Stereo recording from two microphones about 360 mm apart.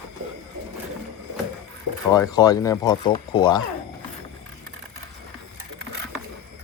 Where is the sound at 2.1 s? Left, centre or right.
Centre.